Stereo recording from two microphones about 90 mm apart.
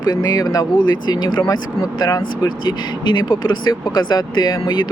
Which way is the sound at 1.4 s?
45° left (ahead or behind).